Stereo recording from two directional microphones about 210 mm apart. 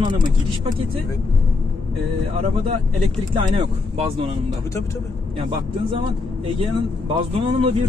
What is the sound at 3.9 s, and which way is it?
Speech, 25° right (ahead or behind).